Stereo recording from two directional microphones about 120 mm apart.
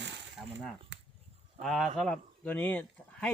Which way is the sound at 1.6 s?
Centre (ahead or behind).